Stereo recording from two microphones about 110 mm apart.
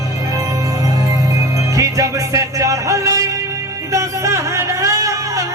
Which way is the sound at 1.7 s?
30° right (ahead or behind).